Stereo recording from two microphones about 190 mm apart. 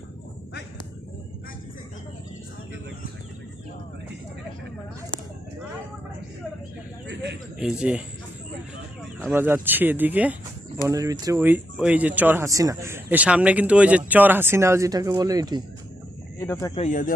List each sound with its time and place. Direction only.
7.1 s a sound: 65° right (ahead or behind)
7.6 s a man's voice: 5° right (ahead or behind)
9.3 s speech: 10° right (ahead or behind)
16.4 s speech: 15° left (ahead or behind)
16.7 s speech: 40° left (ahead or behind)